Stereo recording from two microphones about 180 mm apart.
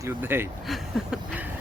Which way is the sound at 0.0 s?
10° right (ahead or behind).